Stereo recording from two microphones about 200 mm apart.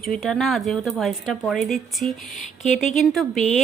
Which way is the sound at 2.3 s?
35° left (ahead or behind).